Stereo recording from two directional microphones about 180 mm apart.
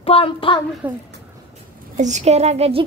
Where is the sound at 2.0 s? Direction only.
40° right (ahead or behind).